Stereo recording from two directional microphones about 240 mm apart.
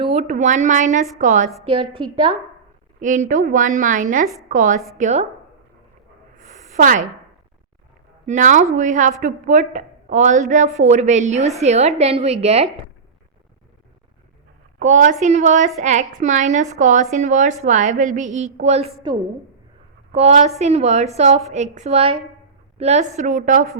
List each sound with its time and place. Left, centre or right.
0.0 s a woman's voice: right
3.0 s a woman's voice: right
6.3 s a sound: right
8.3 s a woman's voice: right
14.8 s a woman's voice: right
20.1 s a woman's voice: right